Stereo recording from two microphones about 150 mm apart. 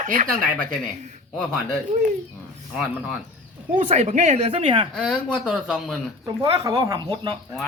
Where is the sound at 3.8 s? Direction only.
55° right (ahead or behind).